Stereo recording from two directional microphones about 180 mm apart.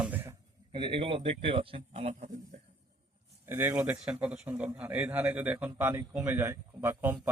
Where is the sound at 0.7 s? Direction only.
30° right (ahead or behind).